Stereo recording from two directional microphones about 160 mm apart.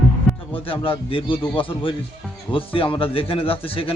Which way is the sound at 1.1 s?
35° left (ahead or behind).